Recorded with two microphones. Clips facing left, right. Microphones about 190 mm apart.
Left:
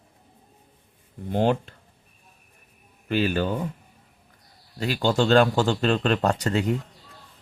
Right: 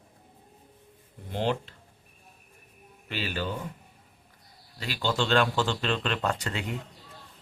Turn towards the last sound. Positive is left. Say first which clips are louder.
# left 8 dB
turn(degrees=40)  # may be behind; listen again after turning